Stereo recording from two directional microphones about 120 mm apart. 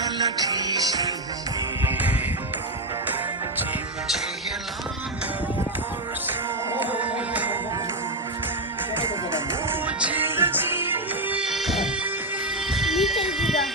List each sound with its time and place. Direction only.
0.0 s music: 35° right (ahead or behind)
1.8 s music: 15° right (ahead or behind)
6.9 s music: 15° right (ahead or behind)
9.6 s music: 15° right (ahead or behind)